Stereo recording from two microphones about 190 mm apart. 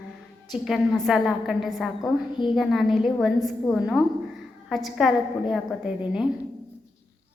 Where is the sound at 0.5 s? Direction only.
Centre (ahead or behind).